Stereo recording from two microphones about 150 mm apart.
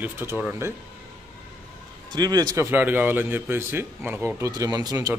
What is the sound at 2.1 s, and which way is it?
Speech, 25° right (ahead or behind).